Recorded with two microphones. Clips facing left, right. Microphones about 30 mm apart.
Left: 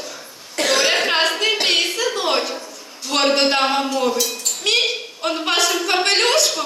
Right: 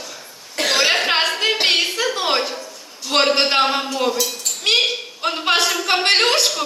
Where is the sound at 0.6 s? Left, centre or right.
Centre.